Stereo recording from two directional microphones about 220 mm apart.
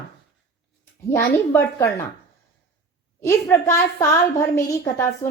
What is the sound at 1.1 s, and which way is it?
Speech, 10° left (ahead or behind).